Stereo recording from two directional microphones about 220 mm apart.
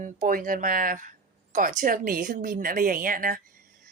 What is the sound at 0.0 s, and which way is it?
A woman's voice, 40° right (ahead or behind).